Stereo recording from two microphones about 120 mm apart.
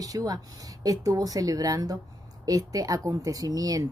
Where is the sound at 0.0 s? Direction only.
30° right (ahead or behind).